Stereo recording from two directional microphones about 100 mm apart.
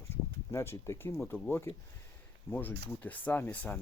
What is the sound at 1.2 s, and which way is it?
Speech, 15° left (ahead or behind).